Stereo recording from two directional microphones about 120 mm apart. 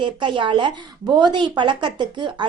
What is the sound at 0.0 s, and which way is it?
A woman's voice, 40° right (ahead or behind).